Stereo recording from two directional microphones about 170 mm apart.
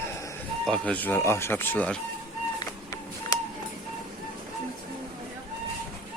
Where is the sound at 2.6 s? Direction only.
20° left (ahead or behind).